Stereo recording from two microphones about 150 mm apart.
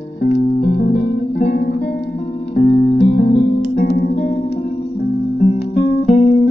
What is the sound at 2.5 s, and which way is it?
Music, 90° left.